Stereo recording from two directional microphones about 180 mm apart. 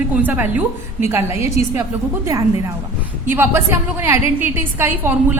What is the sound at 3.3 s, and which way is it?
A woman's voice, 15° right (ahead or behind).